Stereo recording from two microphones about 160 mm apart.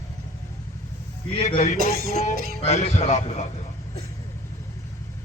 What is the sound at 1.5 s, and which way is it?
A man's voice, 45° left (ahead or behind).